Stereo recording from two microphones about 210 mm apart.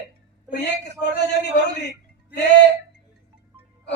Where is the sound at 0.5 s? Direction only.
55° left (ahead or behind).